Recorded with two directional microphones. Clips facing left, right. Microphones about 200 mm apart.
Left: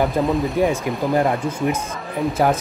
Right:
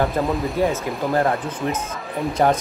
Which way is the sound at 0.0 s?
Centre (ahead or behind).